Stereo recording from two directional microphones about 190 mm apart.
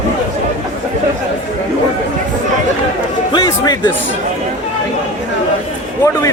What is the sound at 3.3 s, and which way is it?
Music, 20° left (ahead or behind).